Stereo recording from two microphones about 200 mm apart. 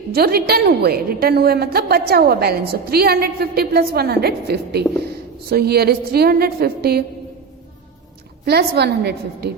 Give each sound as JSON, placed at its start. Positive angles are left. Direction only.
{"t": 0.1, "sound": "a woman's voice", "side_deg": -50}
{"t": 8.4, "sound": "a woman's voice", "side_deg": -55}